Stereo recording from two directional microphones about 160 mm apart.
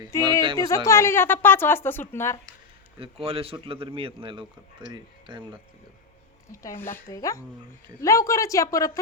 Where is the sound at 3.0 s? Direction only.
35° right (ahead or behind).